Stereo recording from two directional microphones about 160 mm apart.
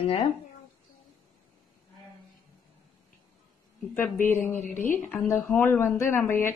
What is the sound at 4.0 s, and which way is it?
A woman's voice, 15° left (ahead or behind).